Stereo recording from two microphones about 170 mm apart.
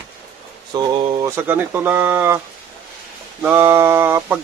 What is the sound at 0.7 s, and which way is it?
Speech, 30° right (ahead or behind).